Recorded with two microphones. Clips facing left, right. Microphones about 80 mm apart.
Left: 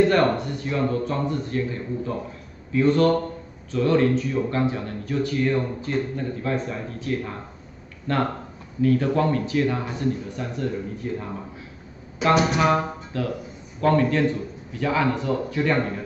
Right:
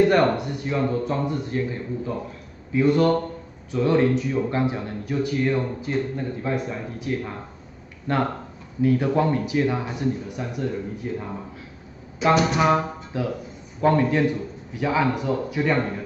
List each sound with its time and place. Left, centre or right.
0.1 s speech: centre
12.5 s music: centre
13.7 s speech: centre